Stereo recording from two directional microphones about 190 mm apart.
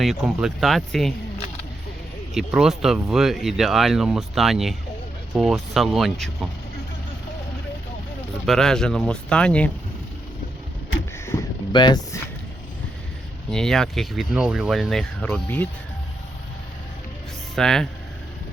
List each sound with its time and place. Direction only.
0.0 s speech: centre (ahead or behind)
2.3 s speech: centre (ahead or behind)
8.4 s speech: 5° left (ahead or behind)
11.3 s a sound: 20° left (ahead or behind)
13.5 s speech: 5° left (ahead or behind)
17.5 s speech: centre (ahead or behind)